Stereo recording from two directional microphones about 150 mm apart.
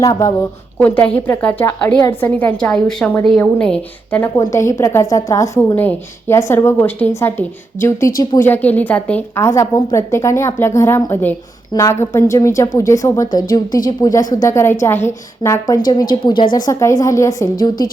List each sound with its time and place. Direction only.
0.0 s a woman's voice: 25° left (ahead or behind)
0.8 s a woman's voice: 10° left (ahead or behind)
4.4 s a woman's voice: 20° left (ahead or behind)
8.2 s a woman's voice: 25° left (ahead or behind)
8.4 s a woman's voice: 10° left (ahead or behind)